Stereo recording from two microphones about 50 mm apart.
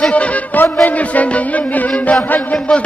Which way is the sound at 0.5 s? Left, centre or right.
Left.